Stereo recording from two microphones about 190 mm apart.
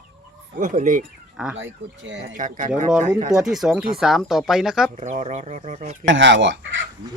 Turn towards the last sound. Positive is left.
turn(degrees=-75)  # may be behind; listen again after turning